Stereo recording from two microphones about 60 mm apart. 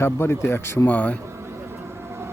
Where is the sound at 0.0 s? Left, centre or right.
Left.